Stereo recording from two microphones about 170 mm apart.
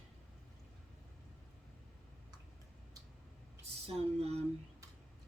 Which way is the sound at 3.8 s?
35° right (ahead or behind).